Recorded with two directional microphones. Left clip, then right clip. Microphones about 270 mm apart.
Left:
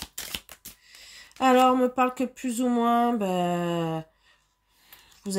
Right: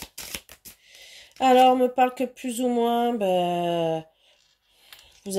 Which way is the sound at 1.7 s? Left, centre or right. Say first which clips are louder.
Right 3 dB; left.